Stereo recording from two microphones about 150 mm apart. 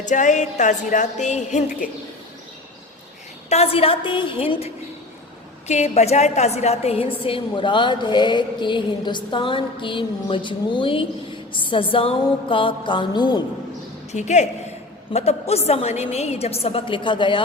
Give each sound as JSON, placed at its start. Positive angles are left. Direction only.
{"t": 0.0, "sound": "a woman's voice", "side_deg": 55}
{"t": 3.5, "sound": "a woman's voice", "side_deg": 40}
{"t": 14.1, "sound": "a woman's voice", "side_deg": 50}